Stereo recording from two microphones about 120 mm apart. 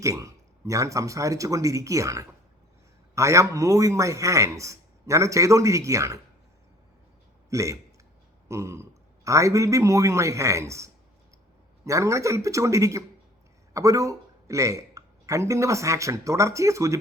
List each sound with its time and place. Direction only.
0.0 s a man's voice: 25° right (ahead or behind)
7.5 s a man's voice: 25° right (ahead or behind)